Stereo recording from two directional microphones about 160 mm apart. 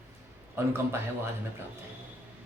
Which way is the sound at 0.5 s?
15° right (ahead or behind).